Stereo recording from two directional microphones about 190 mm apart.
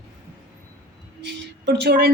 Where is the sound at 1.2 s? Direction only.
70° right (ahead or behind).